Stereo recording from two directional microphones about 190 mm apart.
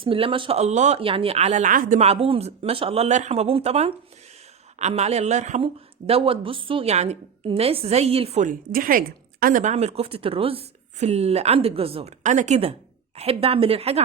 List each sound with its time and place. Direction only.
0.0 s speech: 25° right (ahead or behind)